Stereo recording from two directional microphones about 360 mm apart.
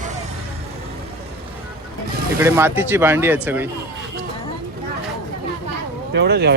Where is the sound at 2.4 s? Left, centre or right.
Centre.